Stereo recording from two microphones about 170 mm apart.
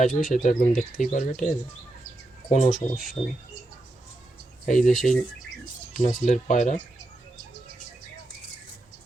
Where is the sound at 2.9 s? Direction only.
Centre (ahead or behind).